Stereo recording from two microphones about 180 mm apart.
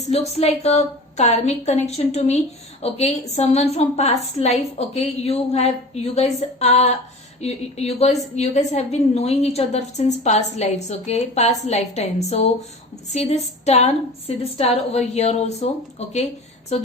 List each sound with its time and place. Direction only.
0.0 s a woman's voice: 35° left (ahead or behind)